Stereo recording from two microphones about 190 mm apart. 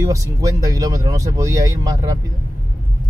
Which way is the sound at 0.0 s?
15° right (ahead or behind).